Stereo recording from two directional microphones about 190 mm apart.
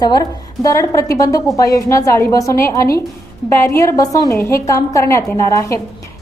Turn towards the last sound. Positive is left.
turn(degrees=15)  # may be behind; listen again after turning